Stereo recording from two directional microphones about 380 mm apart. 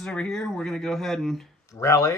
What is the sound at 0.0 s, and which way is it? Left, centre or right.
Speech, centre.